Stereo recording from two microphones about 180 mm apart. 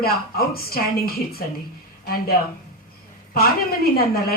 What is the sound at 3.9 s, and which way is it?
Speech, 60° left (ahead or behind).